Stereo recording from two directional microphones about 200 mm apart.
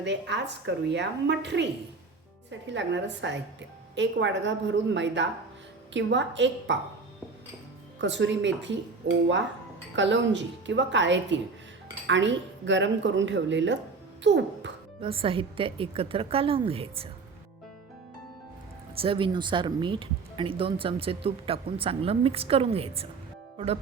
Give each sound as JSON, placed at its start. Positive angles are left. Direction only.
{"t": 0.0, "sound": "speech", "side_deg": -60}
{"t": 8.0, "sound": "speech", "side_deg": -65}
{"t": 15.0, "sound": "speech", "side_deg": -25}
{"t": 18.9, "sound": "speech", "side_deg": -25}